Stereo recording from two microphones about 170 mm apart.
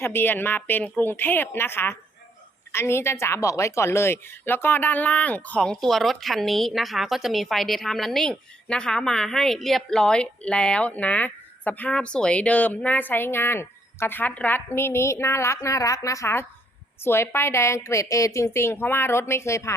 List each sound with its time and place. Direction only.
0.0 s a woman's voice: 10° left (ahead or behind)